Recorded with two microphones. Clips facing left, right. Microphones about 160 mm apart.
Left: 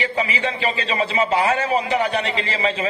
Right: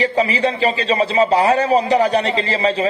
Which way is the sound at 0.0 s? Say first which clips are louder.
Right 6 dB; 35° right (ahead or behind).